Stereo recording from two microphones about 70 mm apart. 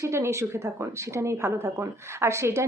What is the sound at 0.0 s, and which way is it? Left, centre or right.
A woman's voice, right.